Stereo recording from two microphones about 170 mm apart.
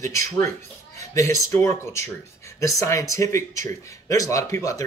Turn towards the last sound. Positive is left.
turn(degrees=20)  # may be behind; listen again after turning